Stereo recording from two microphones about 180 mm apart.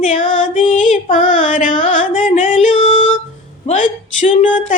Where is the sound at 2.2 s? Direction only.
45° left (ahead or behind).